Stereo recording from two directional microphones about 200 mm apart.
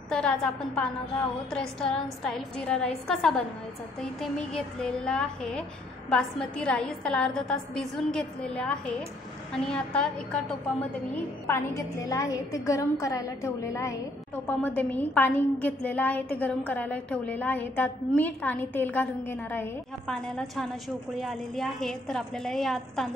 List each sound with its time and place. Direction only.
0.1 s a child's voice: 5° left (ahead or behind)
11.4 s a woman's voice: 15° left (ahead or behind)